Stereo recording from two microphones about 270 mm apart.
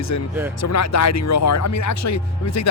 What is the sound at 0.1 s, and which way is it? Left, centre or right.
Speech, left.